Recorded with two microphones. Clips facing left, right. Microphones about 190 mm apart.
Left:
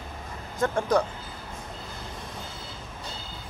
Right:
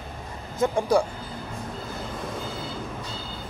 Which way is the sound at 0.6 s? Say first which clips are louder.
Right 2 dB; 10° right (ahead or behind).